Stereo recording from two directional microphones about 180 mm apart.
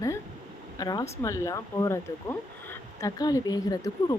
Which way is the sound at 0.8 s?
20° left (ahead or behind).